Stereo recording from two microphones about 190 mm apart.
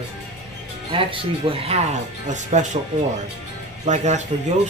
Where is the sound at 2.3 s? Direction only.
40° right (ahead or behind).